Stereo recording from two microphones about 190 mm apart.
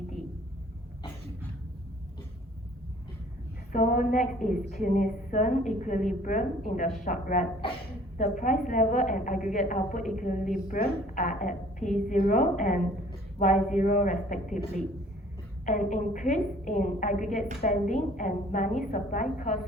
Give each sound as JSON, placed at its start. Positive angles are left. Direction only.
{"t": 3.7, "sound": "a woman's voice", "side_deg": 45}
{"t": 7.6, "sound": "a woman's voice", "side_deg": 30}
{"t": 8.2, "sound": "a woman's voice", "side_deg": 45}
{"t": 15.6, "sound": "a woman's voice", "side_deg": 40}